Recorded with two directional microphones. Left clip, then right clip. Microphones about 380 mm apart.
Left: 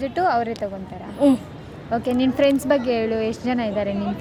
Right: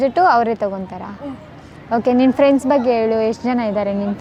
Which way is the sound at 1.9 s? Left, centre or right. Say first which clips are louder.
Right 7 dB; centre.